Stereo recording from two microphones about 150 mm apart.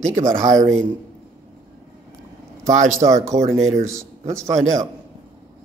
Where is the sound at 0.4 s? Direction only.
55° right (ahead or behind).